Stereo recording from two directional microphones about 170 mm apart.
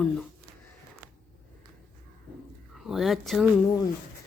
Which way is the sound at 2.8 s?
Centre (ahead or behind).